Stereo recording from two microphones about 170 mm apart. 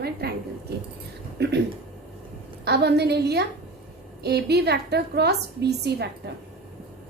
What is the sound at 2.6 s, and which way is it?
A woman's voice, 75° right (ahead or behind).